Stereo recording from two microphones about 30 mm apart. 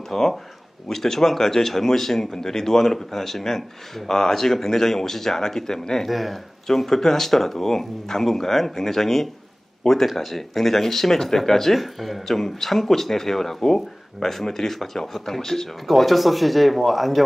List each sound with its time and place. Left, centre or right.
0.1 s speech: centre
6.0 s speech: centre
6.7 s speech: centre
13.6 s speech: left
14.3 s speech: centre
15.9 s speech: centre